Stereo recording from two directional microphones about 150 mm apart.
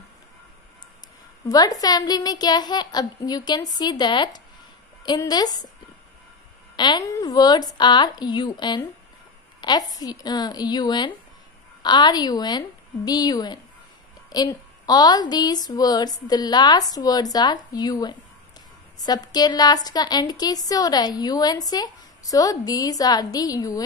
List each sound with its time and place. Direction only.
1.5 s a woman's voice: 25° left (ahead or behind)
6.8 s a woman's voice: 25° left (ahead or behind)